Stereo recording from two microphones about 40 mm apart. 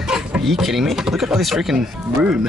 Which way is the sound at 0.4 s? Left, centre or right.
Centre.